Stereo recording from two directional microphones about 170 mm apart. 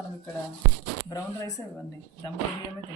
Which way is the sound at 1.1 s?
20° left (ahead or behind).